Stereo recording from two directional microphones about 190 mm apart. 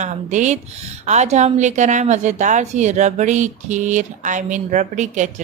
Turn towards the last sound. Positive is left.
turn(degrees=-40)  # may be behind; listen again after turning